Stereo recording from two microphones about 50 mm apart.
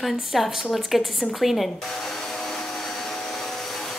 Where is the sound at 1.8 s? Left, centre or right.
Centre.